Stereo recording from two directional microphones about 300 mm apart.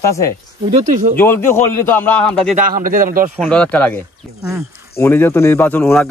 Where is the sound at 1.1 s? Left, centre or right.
Centre.